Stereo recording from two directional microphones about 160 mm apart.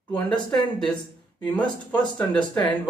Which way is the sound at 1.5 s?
30° left (ahead or behind).